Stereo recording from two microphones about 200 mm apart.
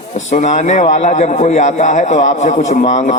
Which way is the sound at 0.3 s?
35° left (ahead or behind).